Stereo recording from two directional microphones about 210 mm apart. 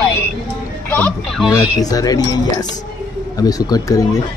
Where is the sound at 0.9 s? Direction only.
5° left (ahead or behind).